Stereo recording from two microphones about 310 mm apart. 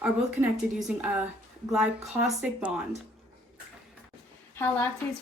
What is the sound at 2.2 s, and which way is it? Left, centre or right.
Speech, centre.